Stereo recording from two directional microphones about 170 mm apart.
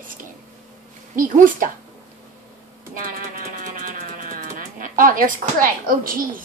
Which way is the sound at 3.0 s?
55° right (ahead or behind).